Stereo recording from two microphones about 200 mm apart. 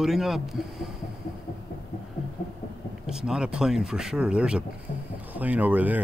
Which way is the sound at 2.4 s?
35° left (ahead or behind).